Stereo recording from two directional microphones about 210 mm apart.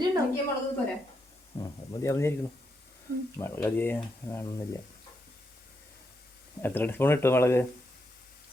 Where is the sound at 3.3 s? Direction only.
10° left (ahead or behind).